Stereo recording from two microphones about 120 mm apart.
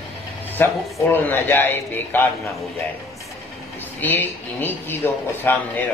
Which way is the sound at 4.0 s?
15° left (ahead or behind).